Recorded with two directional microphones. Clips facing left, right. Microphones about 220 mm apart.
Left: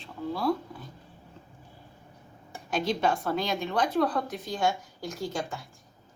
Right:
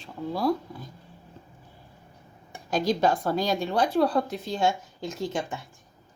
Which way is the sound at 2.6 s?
40° right (ahead or behind).